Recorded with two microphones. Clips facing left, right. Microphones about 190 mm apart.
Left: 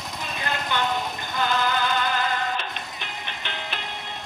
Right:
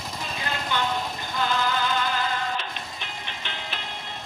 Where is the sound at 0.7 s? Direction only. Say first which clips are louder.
Left 1 dB; 55° left (ahead or behind).